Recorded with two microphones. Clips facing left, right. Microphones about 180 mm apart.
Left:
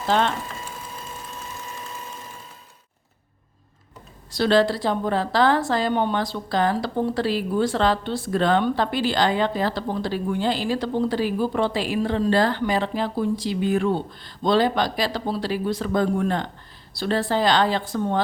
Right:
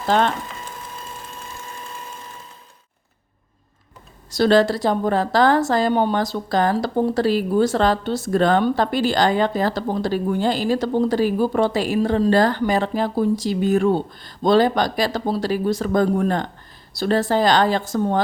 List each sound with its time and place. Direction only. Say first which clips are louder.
0.1 s a woman's voice: right 3 dB; 45° right (ahead or behind)
4.3 s a woman's voice: right 3 dB; 45° right (ahead or behind)